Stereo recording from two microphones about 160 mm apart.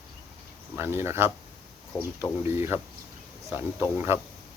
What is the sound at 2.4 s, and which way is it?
Speech, 15° right (ahead or behind).